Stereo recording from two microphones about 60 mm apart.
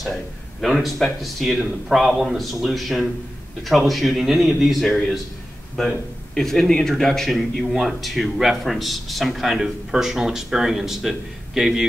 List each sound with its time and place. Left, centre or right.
0.0 s a man's voice: centre